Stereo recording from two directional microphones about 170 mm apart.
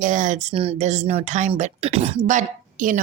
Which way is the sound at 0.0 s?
50° right (ahead or behind).